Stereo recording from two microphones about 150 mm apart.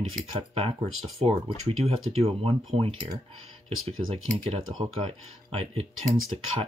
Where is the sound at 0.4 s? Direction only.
40° right (ahead or behind).